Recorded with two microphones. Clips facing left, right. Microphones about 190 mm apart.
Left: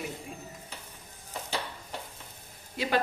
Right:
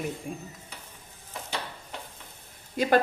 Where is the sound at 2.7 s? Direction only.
50° right (ahead or behind).